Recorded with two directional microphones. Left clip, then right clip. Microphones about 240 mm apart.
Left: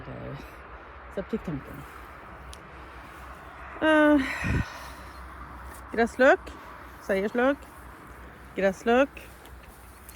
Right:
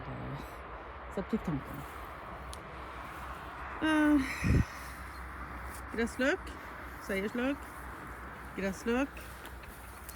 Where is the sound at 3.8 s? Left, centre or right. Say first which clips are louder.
Left 8 dB; centre.